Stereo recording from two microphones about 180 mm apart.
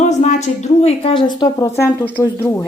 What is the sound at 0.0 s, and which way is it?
A woman's voice, 40° left (ahead or behind).